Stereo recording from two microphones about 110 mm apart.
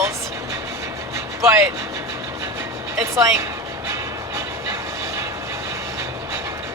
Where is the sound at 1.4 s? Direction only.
25° right (ahead or behind).